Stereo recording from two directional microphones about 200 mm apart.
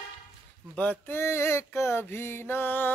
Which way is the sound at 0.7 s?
10° left (ahead or behind).